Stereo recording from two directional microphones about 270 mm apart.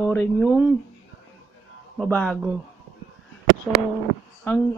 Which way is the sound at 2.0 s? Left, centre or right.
Centre.